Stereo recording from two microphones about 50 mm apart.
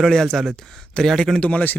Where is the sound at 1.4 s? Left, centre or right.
Left.